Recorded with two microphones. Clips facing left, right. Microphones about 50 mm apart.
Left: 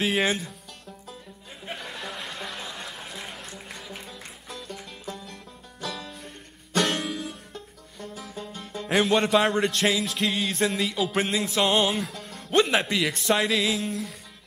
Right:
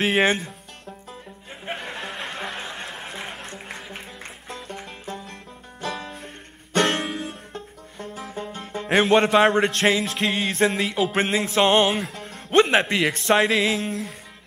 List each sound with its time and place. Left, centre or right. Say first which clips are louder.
0.0 s music: right 4 dB; right
1.7 s a sound: right 4 dB; right
10.1 s music: right 3 dB; right